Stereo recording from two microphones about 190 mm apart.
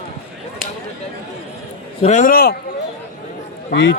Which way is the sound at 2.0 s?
40° left (ahead or behind).